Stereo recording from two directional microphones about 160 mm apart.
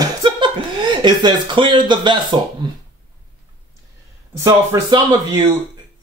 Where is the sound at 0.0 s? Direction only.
30° right (ahead or behind).